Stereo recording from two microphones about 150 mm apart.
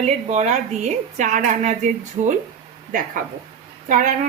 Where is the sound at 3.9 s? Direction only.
55° right (ahead or behind).